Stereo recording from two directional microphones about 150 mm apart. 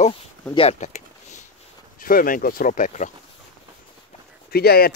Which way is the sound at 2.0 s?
70° left (ahead or behind).